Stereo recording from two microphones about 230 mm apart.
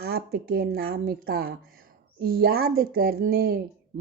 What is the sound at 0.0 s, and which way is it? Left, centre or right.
Speech, right.